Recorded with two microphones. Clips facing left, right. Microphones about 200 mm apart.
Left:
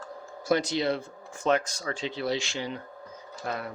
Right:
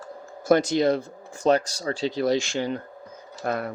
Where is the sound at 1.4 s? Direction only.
35° right (ahead or behind); by 3.7 s 50° right (ahead or behind).